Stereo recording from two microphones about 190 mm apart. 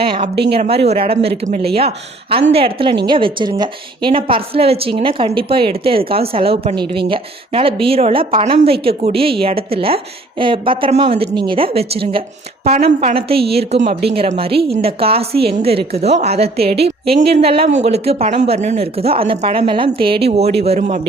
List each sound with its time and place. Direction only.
0.0 s a woman's voice: 30° right (ahead or behind)
13.3 s a woman's voice: 55° right (ahead or behind)
13.8 s speech: 30° right (ahead or behind)